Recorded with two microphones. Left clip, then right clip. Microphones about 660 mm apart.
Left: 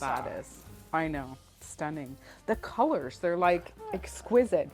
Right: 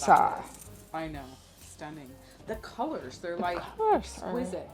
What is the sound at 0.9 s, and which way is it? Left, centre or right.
Speech, left.